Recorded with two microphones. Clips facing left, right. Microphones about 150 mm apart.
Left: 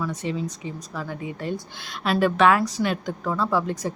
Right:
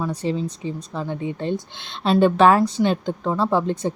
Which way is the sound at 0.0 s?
30° right (ahead or behind).